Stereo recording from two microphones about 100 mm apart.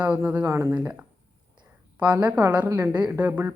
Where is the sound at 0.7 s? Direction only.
10° right (ahead or behind).